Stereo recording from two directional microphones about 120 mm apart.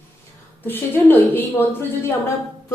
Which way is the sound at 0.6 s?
15° left (ahead or behind).